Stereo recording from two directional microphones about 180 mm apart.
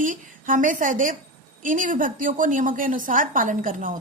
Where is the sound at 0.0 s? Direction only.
50° right (ahead or behind).